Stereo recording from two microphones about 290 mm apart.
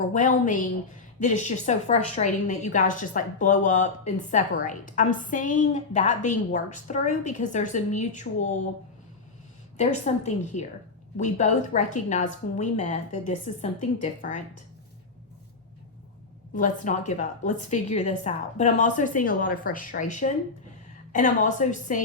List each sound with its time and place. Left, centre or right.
0.0 s a woman's voice: left
9.7 s a woman's voice: left
16.6 s a woman's voice: left